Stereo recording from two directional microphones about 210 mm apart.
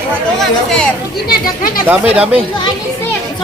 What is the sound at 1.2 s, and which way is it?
Speech, 45° left (ahead or behind).